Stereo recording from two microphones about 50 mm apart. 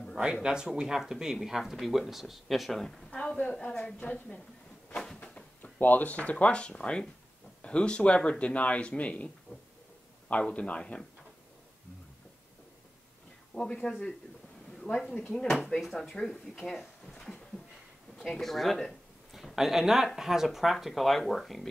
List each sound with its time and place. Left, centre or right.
0.2 s speech: centre
3.1 s a woman's voice: centre
4.9 s a sound: centre
5.2 s drawer open or close: left
5.8 s speech: left
10.5 s speech: left
13.6 s speech: centre
18.1 s speech: centre
19.5 s speech: centre